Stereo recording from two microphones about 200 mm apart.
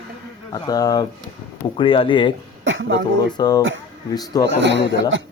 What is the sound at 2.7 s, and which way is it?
Speech, 70° right (ahead or behind).